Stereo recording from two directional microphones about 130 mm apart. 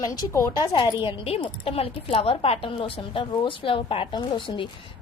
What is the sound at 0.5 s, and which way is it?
A woman's voice, 35° left (ahead or behind).